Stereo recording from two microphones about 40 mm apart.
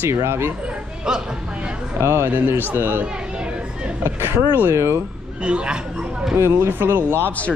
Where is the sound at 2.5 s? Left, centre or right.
Right.